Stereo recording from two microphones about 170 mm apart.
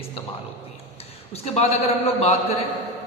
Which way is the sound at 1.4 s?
35° left (ahead or behind).